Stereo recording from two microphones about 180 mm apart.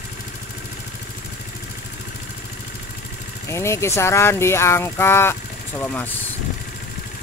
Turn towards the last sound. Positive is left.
turn(degrees=10)  # may be behind; listen again after turning